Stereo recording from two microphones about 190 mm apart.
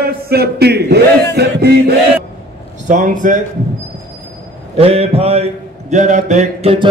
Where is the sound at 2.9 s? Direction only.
45° right (ahead or behind).